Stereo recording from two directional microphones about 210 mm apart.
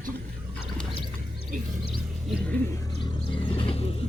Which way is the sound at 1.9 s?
Centre (ahead or behind).